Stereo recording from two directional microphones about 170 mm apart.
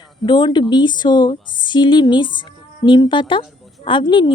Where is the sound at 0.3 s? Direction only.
25° left (ahead or behind).